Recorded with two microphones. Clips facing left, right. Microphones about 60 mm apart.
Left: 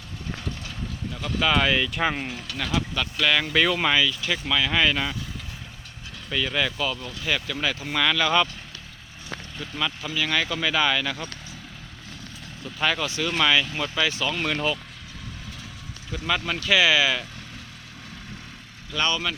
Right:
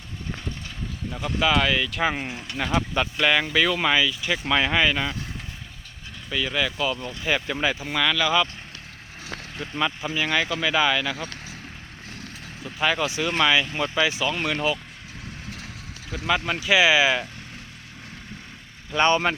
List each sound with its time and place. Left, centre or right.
1.1 s speech: centre
2.3 s speech: centre
3.9 s speech: centre
6.3 s speech: centre
7.9 s speech: centre
9.6 s speech: centre
12.6 s speech: centre
15.4 s vehicle: right
16.1 s speech: centre
18.9 s speech: right